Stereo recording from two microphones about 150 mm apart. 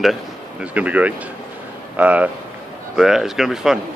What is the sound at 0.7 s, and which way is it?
Speech, 10° right (ahead or behind).